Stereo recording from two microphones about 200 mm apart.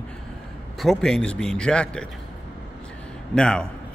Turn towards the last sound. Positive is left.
turn(degrees=5)  # may be behind; listen again after turning